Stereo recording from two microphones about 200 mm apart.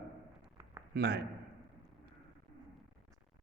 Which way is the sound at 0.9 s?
55° right (ahead or behind).